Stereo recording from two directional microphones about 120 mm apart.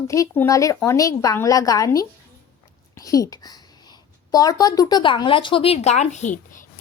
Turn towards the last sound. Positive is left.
turn(degrees=80)